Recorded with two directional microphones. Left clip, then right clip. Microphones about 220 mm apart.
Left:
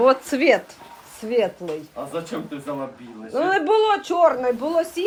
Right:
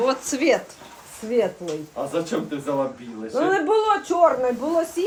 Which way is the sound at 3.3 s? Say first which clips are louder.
Left 1 dB; 45° left (ahead or behind).